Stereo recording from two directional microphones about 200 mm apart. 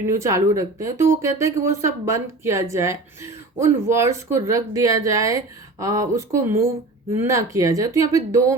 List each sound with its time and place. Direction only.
0.2 s speech: 15° right (ahead or behind)